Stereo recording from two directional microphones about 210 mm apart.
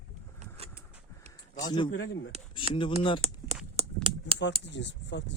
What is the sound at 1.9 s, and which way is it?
Speech, 65° left (ahead or behind).